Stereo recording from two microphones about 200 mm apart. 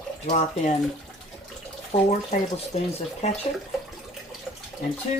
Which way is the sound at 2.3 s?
40° left (ahead or behind).